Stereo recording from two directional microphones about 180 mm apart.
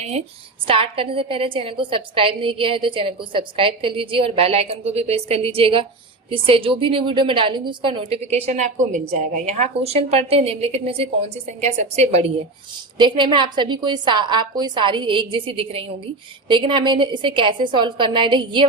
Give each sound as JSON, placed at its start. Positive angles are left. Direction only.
{"t": 0.0, "sound": "a woman's voice", "side_deg": -35}
{"t": 13.0, "sound": "a woman's voice", "side_deg": -25}